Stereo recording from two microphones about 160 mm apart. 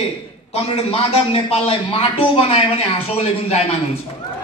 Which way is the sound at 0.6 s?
35° left (ahead or behind).